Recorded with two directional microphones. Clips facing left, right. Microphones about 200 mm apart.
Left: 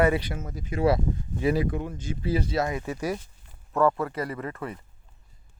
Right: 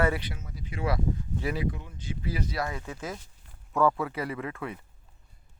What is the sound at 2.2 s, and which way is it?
Speech, 30° left (ahead or behind).